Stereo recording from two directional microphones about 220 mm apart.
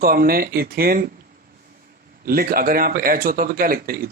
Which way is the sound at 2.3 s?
40° right (ahead or behind).